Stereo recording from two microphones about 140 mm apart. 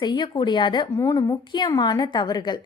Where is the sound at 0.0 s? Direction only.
30° left (ahead or behind).